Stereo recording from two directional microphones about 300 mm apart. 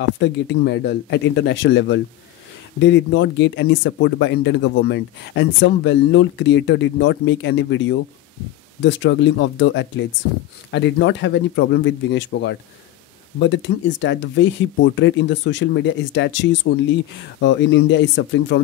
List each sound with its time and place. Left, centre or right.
0.2 s speech: left